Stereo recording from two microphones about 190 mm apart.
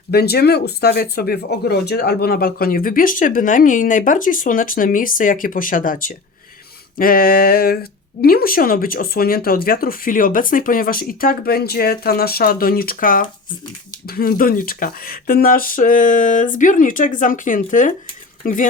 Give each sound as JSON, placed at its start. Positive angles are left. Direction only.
{"t": 0.1, "sound": "speech", "side_deg": 55}